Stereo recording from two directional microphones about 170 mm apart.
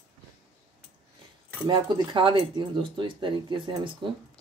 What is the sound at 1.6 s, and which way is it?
Speech, 25° right (ahead or behind).